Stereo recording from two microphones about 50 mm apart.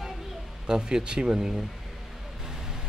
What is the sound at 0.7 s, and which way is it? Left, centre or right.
Speech, centre.